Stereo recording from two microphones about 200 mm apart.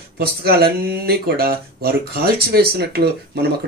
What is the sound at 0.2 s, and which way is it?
Speech, 50° right (ahead or behind).